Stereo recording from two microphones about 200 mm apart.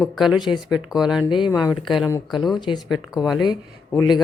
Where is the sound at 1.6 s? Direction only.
Centre (ahead or behind).